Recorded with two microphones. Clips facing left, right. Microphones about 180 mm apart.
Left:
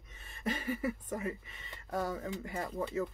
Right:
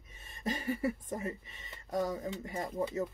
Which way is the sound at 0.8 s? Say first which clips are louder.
Right 1 dB; 30° right (ahead or behind).